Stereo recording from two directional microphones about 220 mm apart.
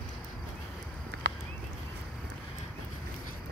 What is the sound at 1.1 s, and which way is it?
Clip-clop, 50° right (ahead or behind).